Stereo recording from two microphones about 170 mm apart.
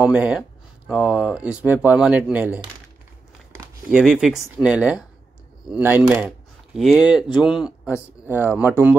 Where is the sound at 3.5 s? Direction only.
5° right (ahead or behind).